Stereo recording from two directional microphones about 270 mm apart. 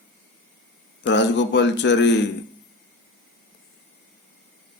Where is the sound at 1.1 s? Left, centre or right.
Left.